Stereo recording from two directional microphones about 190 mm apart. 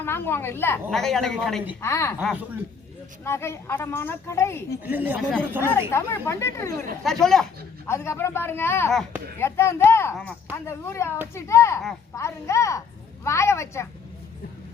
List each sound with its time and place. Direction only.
0.0 s a woman's voice: 10° left (ahead or behind)
1.8 s a woman's voice: 15° left (ahead or behind)
2.2 s speech: 5° right (ahead or behind)
3.2 s a woman's voice: 15° left (ahead or behind)
4.8 s speech: 10° right (ahead or behind)
5.9 s a woman's voice: 15° left (ahead or behind)
7.0 s speech: centre (ahead or behind)
7.9 s a woman's voice: 15° left (ahead or behind)